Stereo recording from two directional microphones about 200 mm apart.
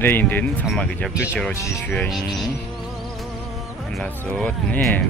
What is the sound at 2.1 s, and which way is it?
Speech, centre (ahead or behind).